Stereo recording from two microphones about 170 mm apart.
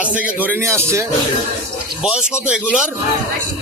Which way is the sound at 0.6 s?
15° right (ahead or behind).